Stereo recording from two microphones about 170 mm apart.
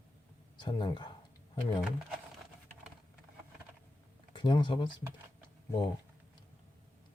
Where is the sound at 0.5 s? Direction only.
25° left (ahead or behind).